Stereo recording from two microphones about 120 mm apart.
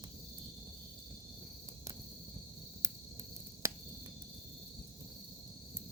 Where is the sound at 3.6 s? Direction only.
25° right (ahead or behind).